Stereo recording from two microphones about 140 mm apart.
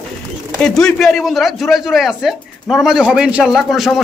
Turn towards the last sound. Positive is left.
turn(degrees=0)  # may be behind; listen again after turning